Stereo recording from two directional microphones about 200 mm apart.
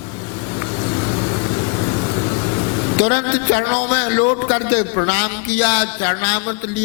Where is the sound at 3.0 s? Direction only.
15° left (ahead or behind).